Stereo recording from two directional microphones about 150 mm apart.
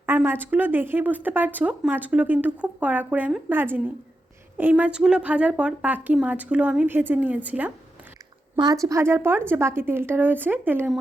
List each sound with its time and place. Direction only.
0.0 s speech: 15° right (ahead or behind)
8.5 s a woman's voice: 25° right (ahead or behind)